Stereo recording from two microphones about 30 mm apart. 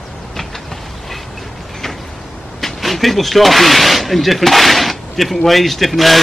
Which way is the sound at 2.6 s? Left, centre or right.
Centre.